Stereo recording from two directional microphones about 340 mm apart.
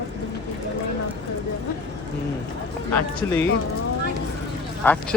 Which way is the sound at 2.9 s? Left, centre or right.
Centre.